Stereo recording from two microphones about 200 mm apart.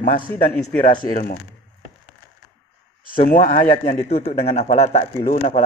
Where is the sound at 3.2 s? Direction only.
40° left (ahead or behind).